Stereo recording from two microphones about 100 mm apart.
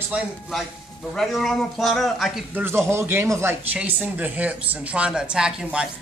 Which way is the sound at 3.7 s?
15° right (ahead or behind).